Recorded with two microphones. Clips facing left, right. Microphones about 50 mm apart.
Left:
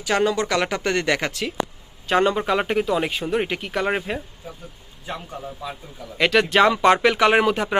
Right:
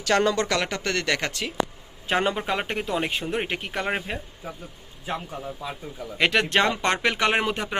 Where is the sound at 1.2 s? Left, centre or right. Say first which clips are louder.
Left 2 dB; centre.